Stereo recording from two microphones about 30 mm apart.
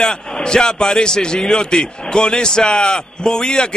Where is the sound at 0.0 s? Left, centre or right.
Left.